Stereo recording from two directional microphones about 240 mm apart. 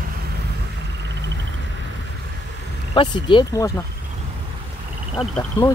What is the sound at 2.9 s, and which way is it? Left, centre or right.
Speech, centre.